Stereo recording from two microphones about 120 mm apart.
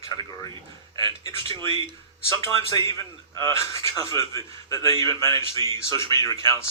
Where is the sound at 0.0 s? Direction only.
30° left (ahead or behind).